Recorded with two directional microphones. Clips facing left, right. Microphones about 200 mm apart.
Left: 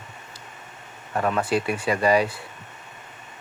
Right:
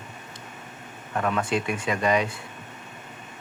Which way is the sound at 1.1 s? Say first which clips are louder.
Left 2 dB; 30° left (ahead or behind).